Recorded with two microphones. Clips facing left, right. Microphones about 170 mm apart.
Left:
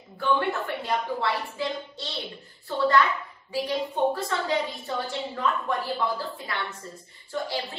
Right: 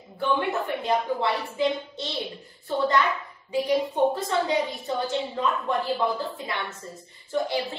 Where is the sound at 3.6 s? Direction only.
20° right (ahead or behind).